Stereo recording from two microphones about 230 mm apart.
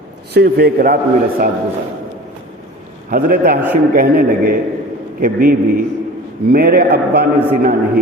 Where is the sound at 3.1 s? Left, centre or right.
Right.